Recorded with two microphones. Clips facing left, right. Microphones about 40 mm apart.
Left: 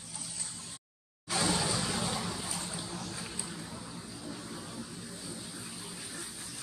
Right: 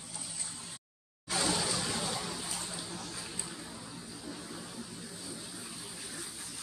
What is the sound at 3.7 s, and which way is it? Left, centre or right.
Vehicle, centre.